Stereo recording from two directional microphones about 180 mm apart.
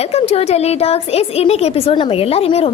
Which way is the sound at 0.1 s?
35° left (ahead or behind).